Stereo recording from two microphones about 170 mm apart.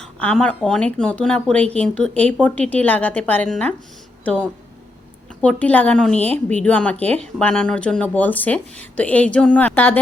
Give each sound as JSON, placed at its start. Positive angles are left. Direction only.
{"t": 0.0, "sound": "speech", "side_deg": 5}